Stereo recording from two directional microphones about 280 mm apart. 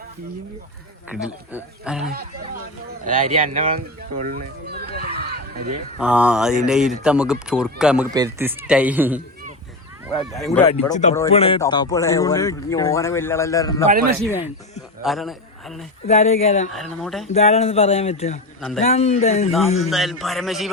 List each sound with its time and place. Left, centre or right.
1.1 s a man's voice: centre
3.0 s speech: right
5.2 s a sound: right
6.0 s a man's voice: centre
10.4 s speech: centre
10.7 s speech: left
13.8 s a man's voice: right
15.0 s a man's voice: centre
16.0 s speech: left
17.0 s a man's voice: centre
17.2 s speech: left
19.5 s a man's voice: centre